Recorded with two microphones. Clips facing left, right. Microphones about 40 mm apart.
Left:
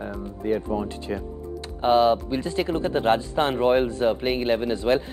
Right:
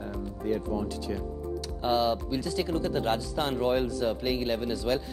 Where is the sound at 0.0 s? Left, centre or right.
Left.